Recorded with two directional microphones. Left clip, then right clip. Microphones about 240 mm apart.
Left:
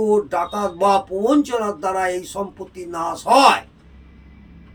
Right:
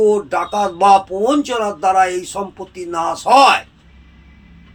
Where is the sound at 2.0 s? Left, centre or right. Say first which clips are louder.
Right 7 dB; centre.